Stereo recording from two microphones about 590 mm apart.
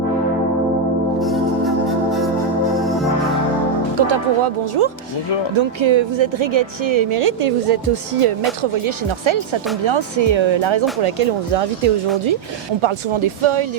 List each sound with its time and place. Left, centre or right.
1.2 s organ: centre
3.9 s speech: right
11.0 s speech: right
12.8 s speech: right